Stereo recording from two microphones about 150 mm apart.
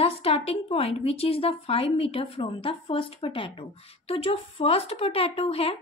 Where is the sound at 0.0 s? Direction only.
40° left (ahead or behind).